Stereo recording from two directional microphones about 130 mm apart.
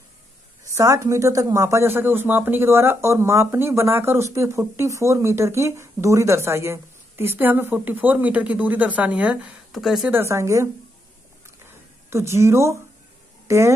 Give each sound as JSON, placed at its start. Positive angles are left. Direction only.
{"t": 0.7, "sound": "speech", "side_deg": -20}
{"t": 10.1, "sound": "speech", "side_deg": -20}
{"t": 12.1, "sound": "a woman's voice", "side_deg": -20}